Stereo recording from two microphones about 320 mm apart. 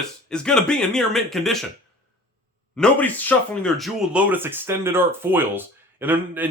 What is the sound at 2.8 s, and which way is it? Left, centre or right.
Speech, centre.